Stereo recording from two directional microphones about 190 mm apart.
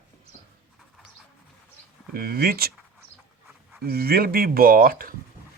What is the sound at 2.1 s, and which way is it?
Speech, 55° right (ahead or behind).